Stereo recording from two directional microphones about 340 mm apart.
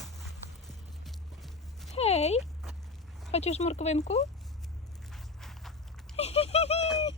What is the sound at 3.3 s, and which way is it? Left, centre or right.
Speech, centre.